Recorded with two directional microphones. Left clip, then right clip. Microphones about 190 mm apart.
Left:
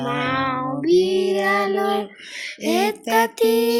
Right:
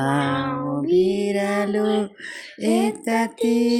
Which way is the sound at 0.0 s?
30° right (ahead or behind).